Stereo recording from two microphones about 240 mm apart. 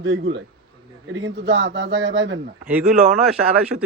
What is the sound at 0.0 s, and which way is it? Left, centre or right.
A man's voice, right.